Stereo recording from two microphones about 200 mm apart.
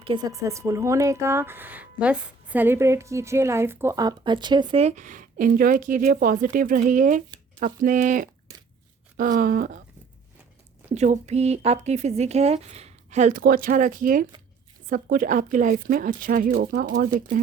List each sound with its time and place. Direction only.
0.0 s a woman's voice: 25° right (ahead or behind); by 9.8 s 45° right (ahead or behind)
10.9 s a woman's voice: 35° right (ahead or behind)